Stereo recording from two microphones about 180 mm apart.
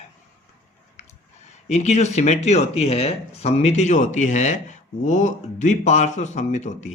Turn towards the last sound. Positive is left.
turn(degrees=40)  # may be behind; listen again after turning